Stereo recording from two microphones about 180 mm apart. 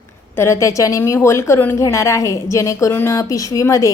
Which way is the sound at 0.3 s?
15° left (ahead or behind).